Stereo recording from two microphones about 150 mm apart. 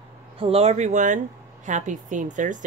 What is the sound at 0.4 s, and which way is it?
A woman's voice, 40° right (ahead or behind).